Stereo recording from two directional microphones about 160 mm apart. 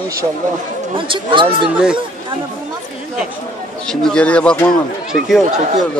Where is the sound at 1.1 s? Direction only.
30° right (ahead or behind).